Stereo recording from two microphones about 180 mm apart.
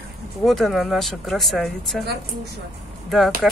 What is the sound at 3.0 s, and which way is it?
Speech, centre (ahead or behind).